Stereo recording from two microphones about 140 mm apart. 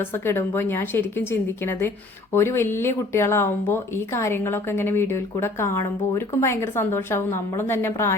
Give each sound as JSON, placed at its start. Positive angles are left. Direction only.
{"t": 0.0, "sound": "speech", "side_deg": 15}